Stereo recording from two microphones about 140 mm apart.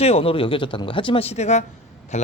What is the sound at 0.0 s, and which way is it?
Speech, 45° left (ahead or behind).